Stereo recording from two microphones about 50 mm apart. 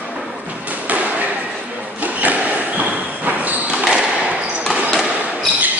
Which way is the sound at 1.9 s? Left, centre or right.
Right.